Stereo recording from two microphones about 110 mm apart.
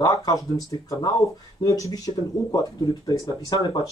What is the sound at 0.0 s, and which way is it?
Speech, 30° left (ahead or behind).